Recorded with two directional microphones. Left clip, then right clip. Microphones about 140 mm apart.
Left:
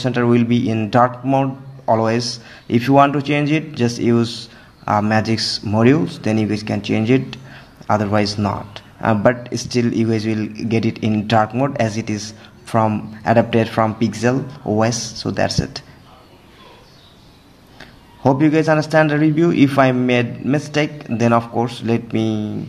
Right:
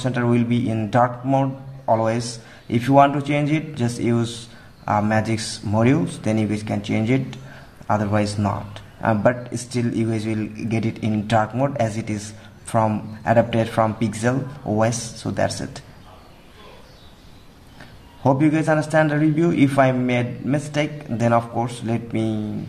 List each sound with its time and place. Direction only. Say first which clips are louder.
0.0 s speech: left 5 dB; 30° left (ahead or behind)
17.7 s speech: left 3 dB; 25° left (ahead or behind)